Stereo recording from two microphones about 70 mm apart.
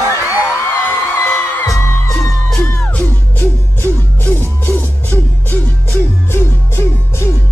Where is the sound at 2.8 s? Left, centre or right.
Left.